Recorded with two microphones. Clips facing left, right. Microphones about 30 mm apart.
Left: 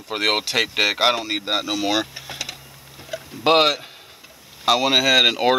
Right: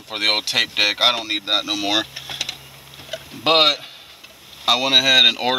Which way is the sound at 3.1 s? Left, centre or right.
Right.